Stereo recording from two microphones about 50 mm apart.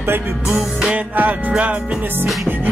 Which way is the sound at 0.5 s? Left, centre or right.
Right.